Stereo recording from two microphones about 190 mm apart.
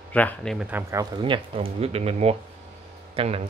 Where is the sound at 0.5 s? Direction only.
10° right (ahead or behind).